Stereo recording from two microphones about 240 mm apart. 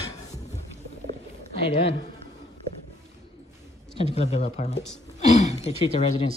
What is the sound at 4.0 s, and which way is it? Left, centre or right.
Speech, left.